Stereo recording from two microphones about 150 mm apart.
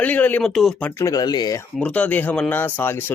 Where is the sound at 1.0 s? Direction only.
25° left (ahead or behind).